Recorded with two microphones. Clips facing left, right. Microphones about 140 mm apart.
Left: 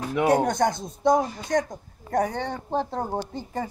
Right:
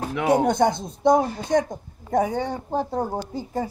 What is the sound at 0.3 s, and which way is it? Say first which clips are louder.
Speech: right 4 dB; 10° right (ahead or behind).